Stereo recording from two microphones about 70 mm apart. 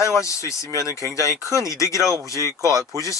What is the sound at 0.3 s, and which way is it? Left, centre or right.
Speech, left.